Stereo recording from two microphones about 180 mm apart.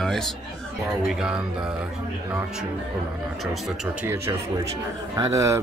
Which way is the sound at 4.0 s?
15° right (ahead or behind).